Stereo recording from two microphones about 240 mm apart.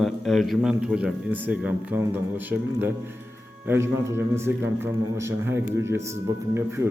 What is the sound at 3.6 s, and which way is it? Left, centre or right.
A man's voice, centre.